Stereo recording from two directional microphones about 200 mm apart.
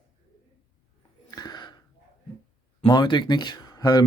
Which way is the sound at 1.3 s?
20° left (ahead or behind).